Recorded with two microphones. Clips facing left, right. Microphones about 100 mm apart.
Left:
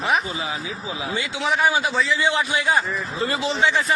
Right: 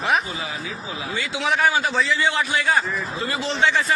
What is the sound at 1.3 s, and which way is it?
Speech, centre (ahead or behind).